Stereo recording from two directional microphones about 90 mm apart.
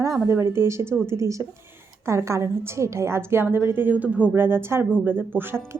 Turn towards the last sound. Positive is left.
turn(degrees=-20)  # may be behind; listen again after turning